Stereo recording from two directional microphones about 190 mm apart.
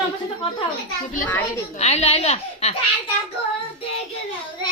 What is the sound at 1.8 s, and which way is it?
Speech, 35° left (ahead or behind).